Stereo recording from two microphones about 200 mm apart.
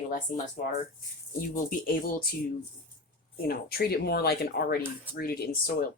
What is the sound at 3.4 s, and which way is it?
Speech, 50° left (ahead or behind).